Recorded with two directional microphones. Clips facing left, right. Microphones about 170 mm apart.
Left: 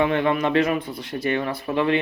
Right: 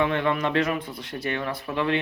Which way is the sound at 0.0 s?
10° left (ahead or behind).